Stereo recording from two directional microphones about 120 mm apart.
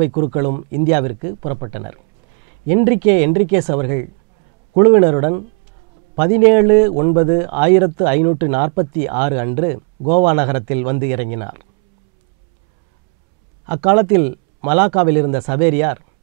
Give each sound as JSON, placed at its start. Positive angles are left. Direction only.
{"t": 0.0, "sound": "a man's voice", "side_deg": -15}
{"t": 13.7, "sound": "a man's voice", "side_deg": -15}